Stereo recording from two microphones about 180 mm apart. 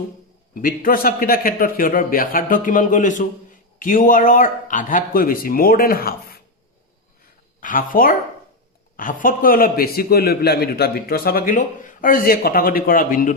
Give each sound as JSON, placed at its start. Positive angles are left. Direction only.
{"t": 0.5, "sound": "a man's voice", "side_deg": 50}
{"t": 7.6, "sound": "a man's voice", "side_deg": 50}